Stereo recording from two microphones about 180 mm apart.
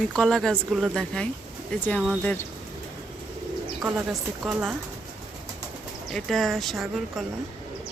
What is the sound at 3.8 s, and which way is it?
Speech, 5° right (ahead or behind).